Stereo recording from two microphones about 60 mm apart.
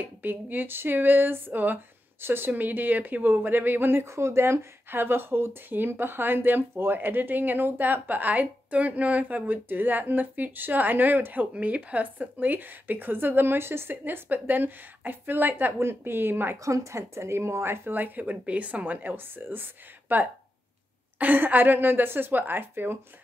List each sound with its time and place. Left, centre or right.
0.0 s speech: right
16.6 s speech: right